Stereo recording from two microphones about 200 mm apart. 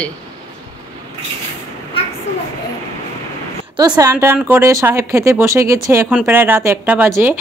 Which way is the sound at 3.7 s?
20° right (ahead or behind).